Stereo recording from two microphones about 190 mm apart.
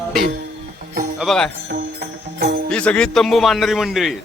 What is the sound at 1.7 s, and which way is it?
Music, 60° right (ahead or behind).